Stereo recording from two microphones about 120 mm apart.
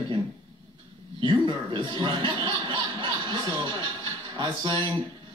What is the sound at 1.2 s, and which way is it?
A woman's voice, 45° right (ahead or behind).